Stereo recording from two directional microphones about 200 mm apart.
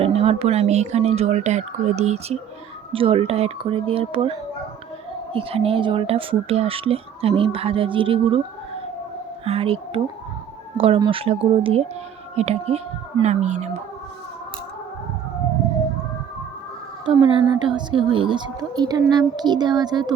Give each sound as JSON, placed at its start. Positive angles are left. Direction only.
{"t": 0.0, "sound": "speech", "side_deg": -30}
{"t": 9.4, "sound": "speech", "side_deg": -30}
{"t": 17.2, "sound": "speech", "side_deg": -25}